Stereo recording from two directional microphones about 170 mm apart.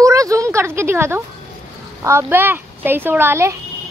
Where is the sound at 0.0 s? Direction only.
20° right (ahead or behind).